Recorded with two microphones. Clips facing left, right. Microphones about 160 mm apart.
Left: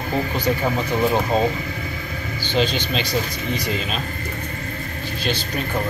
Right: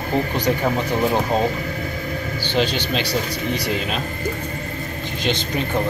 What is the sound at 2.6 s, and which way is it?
Speech, 10° right (ahead or behind).